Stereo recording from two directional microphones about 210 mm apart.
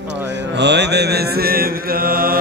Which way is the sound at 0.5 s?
55° right (ahead or behind).